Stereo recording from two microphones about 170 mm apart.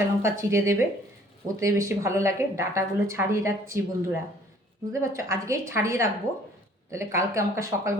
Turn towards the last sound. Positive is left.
turn(degrees=-15)  # may be behind; listen again after turning